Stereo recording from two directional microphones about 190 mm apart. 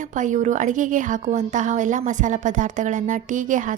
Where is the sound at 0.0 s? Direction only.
40° right (ahead or behind).